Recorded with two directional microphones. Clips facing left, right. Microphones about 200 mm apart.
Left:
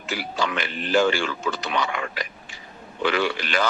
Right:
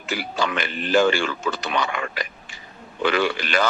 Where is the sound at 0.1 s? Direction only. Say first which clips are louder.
Right 2 dB; 50° right (ahead or behind).